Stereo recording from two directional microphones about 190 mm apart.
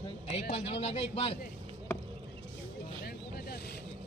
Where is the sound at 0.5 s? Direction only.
35° left (ahead or behind).